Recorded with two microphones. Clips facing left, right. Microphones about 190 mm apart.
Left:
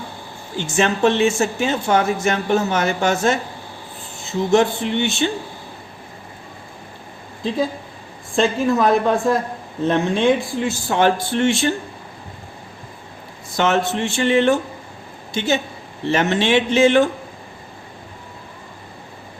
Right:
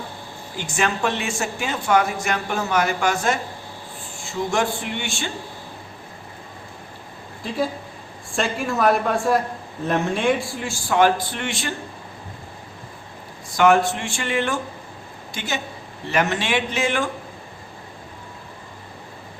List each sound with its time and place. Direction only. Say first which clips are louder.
0.5 s speech: left 5 dB; 25° left (ahead or behind)
8.6 s speech: left 1 dB; 20° left (ahead or behind)
13.6 s speech: right 1 dB; 25° left (ahead or behind)